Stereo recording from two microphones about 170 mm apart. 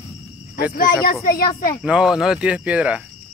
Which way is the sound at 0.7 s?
55° left (ahead or behind).